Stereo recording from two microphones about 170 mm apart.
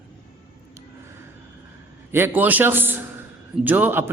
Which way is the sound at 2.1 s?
10° right (ahead or behind).